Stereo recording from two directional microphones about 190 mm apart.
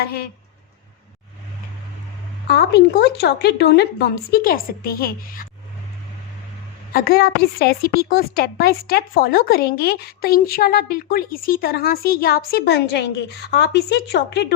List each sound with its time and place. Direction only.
0.0 s a woman's voice: 55° left (ahead or behind)
2.5 s speech: 60° left (ahead or behind)
6.9 s a woman's voice: 50° left (ahead or behind)